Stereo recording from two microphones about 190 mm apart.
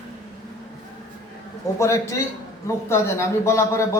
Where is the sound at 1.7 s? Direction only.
15° left (ahead or behind).